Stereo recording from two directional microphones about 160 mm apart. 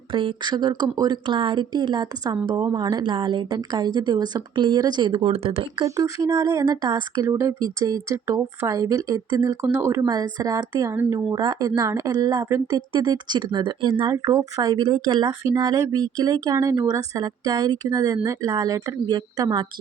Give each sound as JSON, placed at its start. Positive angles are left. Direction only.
{"t": 0.1, "sound": "speech", "side_deg": -30}
{"t": 5.8, "sound": "speech", "side_deg": -20}